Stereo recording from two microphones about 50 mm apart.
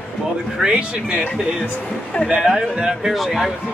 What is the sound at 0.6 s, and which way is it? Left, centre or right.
Speech, right.